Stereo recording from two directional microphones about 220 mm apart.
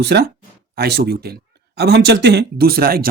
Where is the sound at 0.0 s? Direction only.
50° right (ahead or behind).